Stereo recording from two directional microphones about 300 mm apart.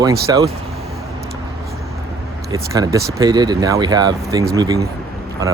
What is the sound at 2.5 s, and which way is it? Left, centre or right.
Speech, centre.